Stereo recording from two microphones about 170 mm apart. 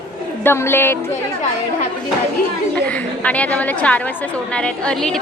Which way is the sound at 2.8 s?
10° left (ahead or behind).